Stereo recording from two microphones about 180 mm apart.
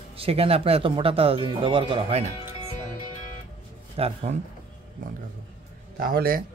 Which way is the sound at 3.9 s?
35° right (ahead or behind).